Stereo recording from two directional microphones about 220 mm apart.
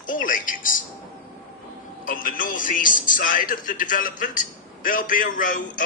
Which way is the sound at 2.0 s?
40° left (ahead or behind).